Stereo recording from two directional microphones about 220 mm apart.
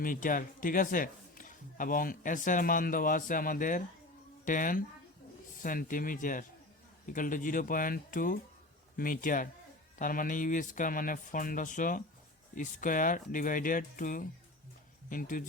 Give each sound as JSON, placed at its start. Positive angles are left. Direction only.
{"t": 0.0, "sound": "a man's voice", "side_deg": 40}